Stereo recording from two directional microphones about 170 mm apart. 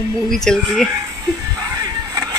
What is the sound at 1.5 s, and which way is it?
Vehicle, 20° right (ahead or behind).